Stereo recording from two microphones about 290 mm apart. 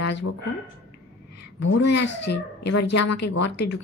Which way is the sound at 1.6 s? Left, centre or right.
Left.